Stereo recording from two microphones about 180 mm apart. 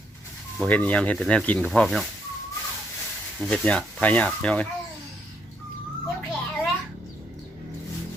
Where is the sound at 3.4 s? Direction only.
5° left (ahead or behind).